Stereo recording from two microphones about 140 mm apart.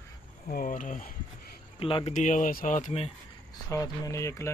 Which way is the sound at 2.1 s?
65° left (ahead or behind).